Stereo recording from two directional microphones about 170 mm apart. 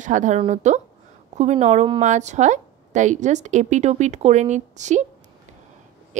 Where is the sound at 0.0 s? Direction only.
45° right (ahead or behind).